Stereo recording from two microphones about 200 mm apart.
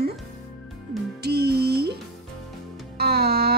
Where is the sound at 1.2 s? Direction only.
50° right (ahead or behind).